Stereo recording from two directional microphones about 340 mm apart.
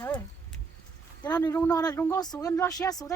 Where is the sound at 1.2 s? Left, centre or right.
Centre.